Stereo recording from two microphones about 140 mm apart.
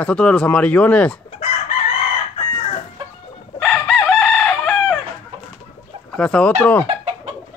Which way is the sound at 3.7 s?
5° left (ahead or behind).